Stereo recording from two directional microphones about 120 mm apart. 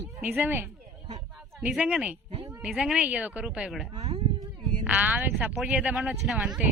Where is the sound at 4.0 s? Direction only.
60° right (ahead or behind).